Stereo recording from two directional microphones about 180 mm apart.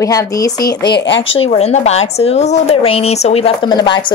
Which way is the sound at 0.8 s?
70° left (ahead or behind).